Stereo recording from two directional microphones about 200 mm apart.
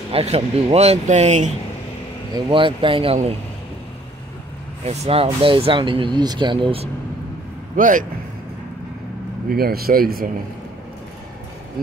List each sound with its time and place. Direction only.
0.1 s speech: 30° right (ahead or behind)
2.3 s speech: 25° right (ahead or behind)
4.8 s speech: 30° right (ahead or behind)
7.7 s speech: 40° right (ahead or behind)
9.5 s speech: 50° right (ahead or behind)